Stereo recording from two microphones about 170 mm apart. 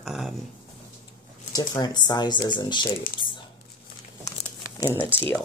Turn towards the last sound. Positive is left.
turn(degrees=10)  # may be behind; listen again after turning